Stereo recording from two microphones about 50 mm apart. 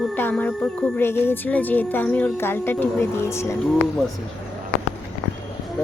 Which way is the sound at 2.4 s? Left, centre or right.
Left.